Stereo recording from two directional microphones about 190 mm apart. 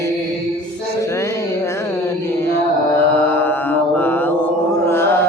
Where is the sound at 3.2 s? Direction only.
10° left (ahead or behind).